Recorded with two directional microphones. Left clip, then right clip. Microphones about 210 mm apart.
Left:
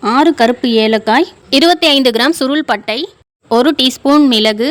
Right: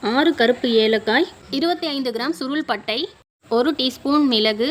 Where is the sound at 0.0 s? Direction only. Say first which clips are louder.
Left 7 dB; 30° left (ahead or behind).